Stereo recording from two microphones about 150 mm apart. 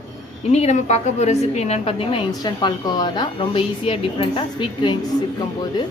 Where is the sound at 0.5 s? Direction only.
45° left (ahead or behind).